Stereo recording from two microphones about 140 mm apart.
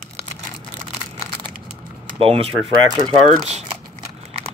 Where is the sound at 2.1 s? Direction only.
40° right (ahead or behind).